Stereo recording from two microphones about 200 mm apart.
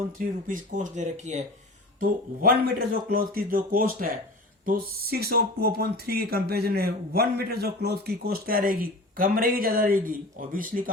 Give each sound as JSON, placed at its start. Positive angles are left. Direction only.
{"t": 0.2, "sound": "speech", "side_deg": -45}
{"t": 2.0, "sound": "speech", "side_deg": -45}